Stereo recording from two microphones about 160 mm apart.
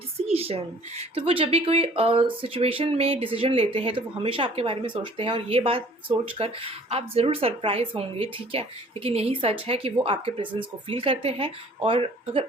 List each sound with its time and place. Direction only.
0.3 s speech: 40° right (ahead or behind)